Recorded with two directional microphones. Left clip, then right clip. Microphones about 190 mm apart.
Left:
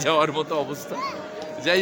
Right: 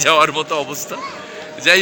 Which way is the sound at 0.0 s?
5° left (ahead or behind).